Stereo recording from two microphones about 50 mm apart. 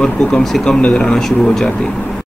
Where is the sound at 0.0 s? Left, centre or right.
Centre.